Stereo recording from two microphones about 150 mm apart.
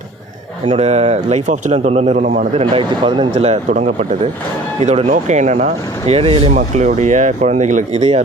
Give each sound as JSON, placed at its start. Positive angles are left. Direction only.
{"t": 0.6, "sound": "speech", "side_deg": -40}
{"t": 2.6, "sound": "a man's voice", "side_deg": -35}
{"t": 3.3, "sound": "speech", "side_deg": -50}